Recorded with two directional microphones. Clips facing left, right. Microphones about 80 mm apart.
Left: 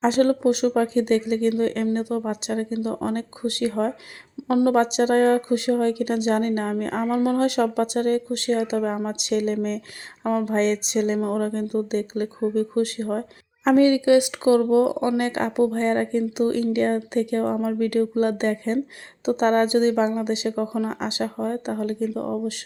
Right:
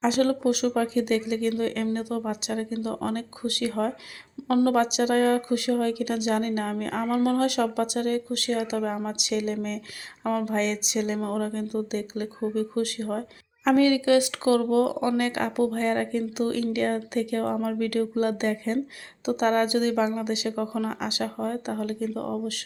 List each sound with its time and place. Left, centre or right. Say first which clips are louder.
0.0 s speech: left 4 dB; left
2.7 s speech: left 3 dB; left
4.8 s speech: left 4 dB; left